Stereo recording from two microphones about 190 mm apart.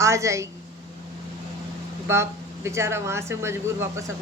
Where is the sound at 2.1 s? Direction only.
15° right (ahead or behind).